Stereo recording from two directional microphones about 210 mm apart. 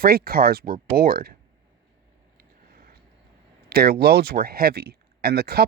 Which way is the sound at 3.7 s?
45° right (ahead or behind).